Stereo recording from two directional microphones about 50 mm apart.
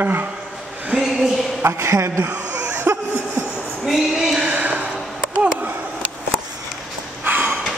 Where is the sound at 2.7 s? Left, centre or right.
Right.